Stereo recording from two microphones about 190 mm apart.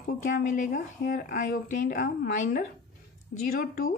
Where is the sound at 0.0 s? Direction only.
45° left (ahead or behind).